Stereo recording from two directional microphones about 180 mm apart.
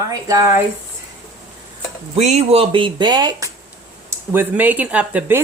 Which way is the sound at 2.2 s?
40° right (ahead or behind).